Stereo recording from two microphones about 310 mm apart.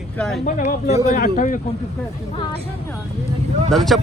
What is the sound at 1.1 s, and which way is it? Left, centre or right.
Speech, left.